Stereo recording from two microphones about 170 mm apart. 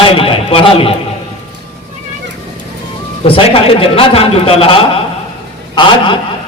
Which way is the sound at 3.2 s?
35° left (ahead or behind).